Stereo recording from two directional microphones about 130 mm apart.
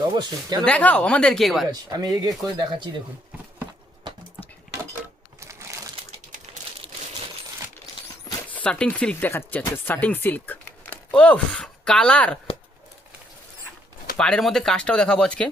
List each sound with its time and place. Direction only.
0.6 s speech: 10° left (ahead or behind)
1.7 s speech: 30° right (ahead or behind)
5.4 s crumpling: 20° right (ahead or behind)
8.4 s speech: 10° left (ahead or behind)
14.2 s speech: 5° left (ahead or behind)